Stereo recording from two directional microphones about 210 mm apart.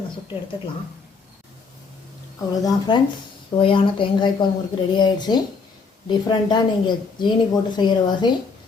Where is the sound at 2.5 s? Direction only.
20° left (ahead or behind).